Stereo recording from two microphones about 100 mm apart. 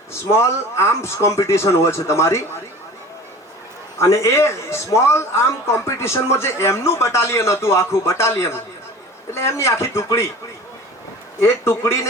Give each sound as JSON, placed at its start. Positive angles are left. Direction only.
{"t": 0.1, "sound": "a man's voice", "side_deg": 25}
{"t": 3.9, "sound": "a man's voice", "side_deg": 30}
{"t": 11.3, "sound": "a man's voice", "side_deg": 30}